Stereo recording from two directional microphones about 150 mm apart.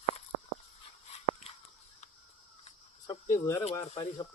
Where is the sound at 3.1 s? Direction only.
20° left (ahead or behind).